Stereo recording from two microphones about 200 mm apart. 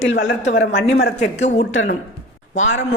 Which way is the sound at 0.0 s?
70° left (ahead or behind).